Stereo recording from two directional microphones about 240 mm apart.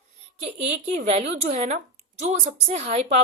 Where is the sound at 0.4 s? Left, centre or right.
Right.